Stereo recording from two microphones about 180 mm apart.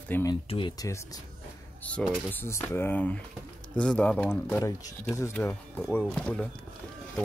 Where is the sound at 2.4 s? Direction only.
15° left (ahead or behind).